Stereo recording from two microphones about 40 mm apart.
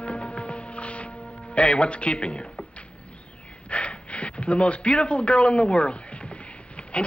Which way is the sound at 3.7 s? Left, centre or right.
Left.